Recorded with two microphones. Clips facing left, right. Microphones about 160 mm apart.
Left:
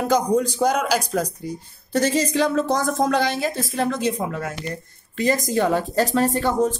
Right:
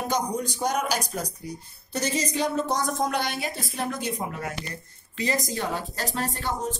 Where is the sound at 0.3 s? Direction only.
90° left.